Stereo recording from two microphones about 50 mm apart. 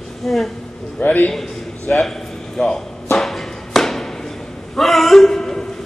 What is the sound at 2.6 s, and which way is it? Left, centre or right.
Speech, centre.